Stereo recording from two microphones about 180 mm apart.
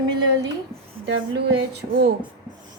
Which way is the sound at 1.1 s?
85° right.